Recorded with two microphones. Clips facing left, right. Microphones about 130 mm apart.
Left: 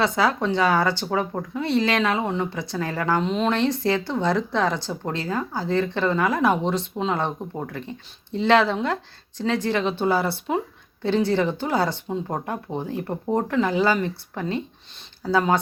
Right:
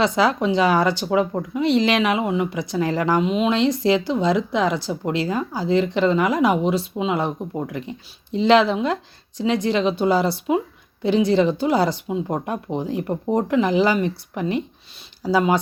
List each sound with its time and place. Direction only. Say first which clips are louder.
0.0 s speech: right 3 dB; 20° right (ahead or behind)